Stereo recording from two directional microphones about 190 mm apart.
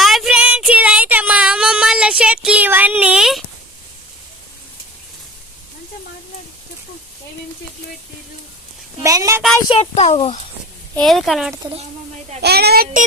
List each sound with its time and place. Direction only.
0.0 s a sound: centre (ahead or behind)
9.0 s a woman's voice: 15° right (ahead or behind)
9.6 s a child's voice: 30° left (ahead or behind)
10.9 s a woman's voice: centre (ahead or behind)
12.4 s speech: 60° right (ahead or behind)